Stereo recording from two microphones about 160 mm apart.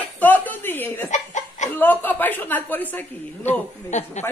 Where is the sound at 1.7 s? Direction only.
10° left (ahead or behind).